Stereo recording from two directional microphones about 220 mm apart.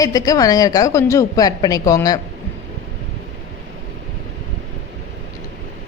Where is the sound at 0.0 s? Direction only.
15° left (ahead or behind).